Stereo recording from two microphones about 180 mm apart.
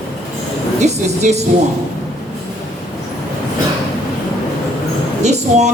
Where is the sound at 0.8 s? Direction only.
40° right (ahead or behind).